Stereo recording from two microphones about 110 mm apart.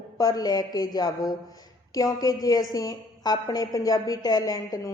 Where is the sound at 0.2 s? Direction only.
35° left (ahead or behind).